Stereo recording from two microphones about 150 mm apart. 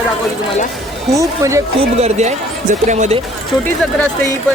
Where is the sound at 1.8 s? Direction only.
45° right (ahead or behind).